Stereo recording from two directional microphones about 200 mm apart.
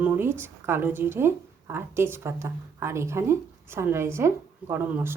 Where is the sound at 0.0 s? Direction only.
10° right (ahead or behind).